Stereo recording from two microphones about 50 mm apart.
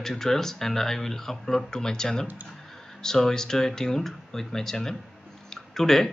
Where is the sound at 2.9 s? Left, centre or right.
Centre.